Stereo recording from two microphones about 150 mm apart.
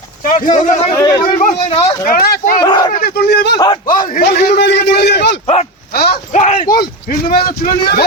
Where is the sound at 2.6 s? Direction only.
25° left (ahead or behind).